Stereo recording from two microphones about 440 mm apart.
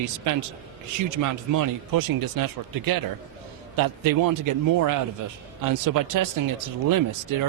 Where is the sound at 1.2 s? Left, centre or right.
Right.